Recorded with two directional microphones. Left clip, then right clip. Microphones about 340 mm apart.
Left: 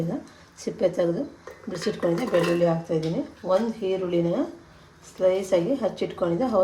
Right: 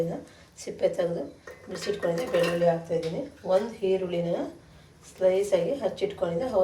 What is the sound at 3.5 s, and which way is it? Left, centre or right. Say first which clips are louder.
A woman's voice: left 1 dB; left.